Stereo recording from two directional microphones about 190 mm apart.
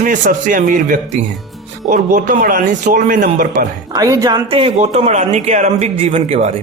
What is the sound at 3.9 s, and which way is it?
Speech, 20° right (ahead or behind).